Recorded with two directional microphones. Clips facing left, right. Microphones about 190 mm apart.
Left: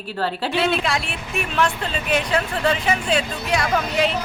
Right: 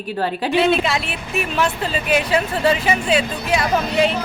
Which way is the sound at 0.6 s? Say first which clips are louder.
Right 3 dB; centre (ahead or behind).